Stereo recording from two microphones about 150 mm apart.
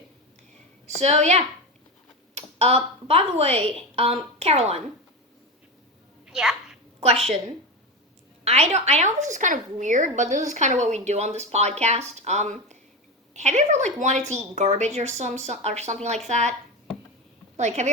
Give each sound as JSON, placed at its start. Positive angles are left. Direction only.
{"t": 0.9, "sound": "a woman's voice", "side_deg": -45}
{"t": 6.2, "sound": "a sound", "side_deg": 0}
{"t": 7.0, "sound": "speech", "side_deg": -45}
{"t": 8.4, "sound": "speech", "side_deg": -45}
{"t": 17.6, "sound": "speech", "side_deg": -50}